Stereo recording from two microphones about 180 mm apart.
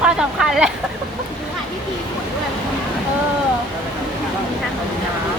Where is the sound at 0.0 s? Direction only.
Centre (ahead or behind).